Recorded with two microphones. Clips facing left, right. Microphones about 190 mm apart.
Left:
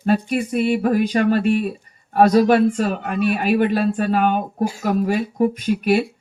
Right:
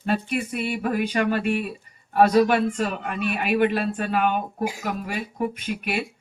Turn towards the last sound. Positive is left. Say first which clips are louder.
# left 10 dB
turn(degrees=35)  # may be behind; listen again after turning